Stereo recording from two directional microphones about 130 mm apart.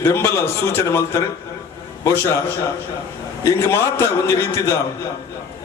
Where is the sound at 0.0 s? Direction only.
20° left (ahead or behind).